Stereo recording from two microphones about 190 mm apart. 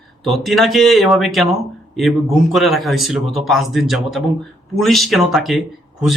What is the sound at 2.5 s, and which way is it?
A man's voice, centre (ahead or behind).